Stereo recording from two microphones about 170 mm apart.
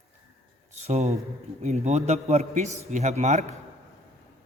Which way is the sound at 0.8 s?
40° right (ahead or behind).